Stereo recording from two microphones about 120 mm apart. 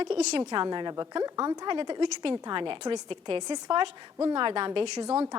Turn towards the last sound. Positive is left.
turn(degrees=-45)  # may be behind; listen again after turning